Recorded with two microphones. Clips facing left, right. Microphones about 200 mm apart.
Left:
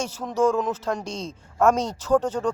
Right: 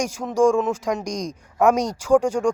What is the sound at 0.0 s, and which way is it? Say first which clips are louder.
Speech: right 4 dB; 10° right (ahead or behind).